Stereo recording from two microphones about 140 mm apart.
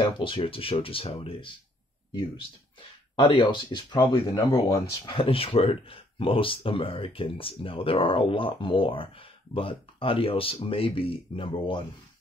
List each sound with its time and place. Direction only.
0.2 s speech: 35° left (ahead or behind)
3.2 s speech: 35° left (ahead or behind)
5.0 s speech: 35° left (ahead or behind)